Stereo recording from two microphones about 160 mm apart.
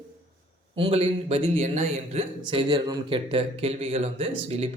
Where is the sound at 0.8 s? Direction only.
35° right (ahead or behind).